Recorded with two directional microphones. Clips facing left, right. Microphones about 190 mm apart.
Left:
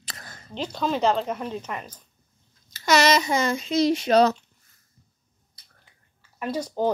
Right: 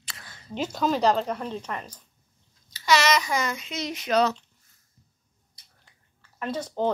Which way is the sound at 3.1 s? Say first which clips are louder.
Left 4 dB; 25° left (ahead or behind).